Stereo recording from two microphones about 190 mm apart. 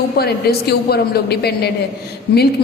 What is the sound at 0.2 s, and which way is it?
A man's voice, 55° left (ahead or behind).